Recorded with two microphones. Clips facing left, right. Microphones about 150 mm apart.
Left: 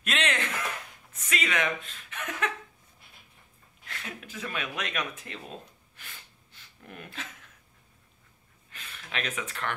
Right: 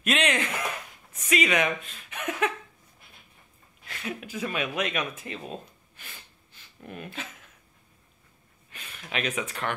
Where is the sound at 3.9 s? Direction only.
10° right (ahead or behind).